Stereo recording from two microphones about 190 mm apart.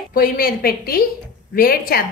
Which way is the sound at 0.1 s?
50° left (ahead or behind).